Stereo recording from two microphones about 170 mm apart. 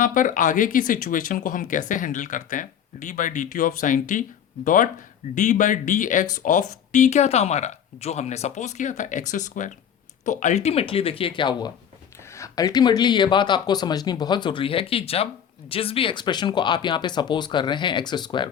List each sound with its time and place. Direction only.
0.0 s speech: 50° left (ahead or behind); by 18.5 s 25° left (ahead or behind)